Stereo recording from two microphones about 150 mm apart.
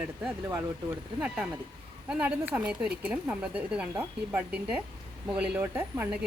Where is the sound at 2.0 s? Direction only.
10° right (ahead or behind).